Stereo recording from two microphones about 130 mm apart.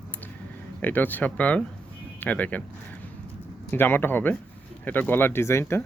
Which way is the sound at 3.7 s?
15° left (ahead or behind).